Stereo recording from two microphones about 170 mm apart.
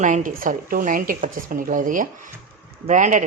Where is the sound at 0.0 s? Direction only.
50° right (ahead or behind).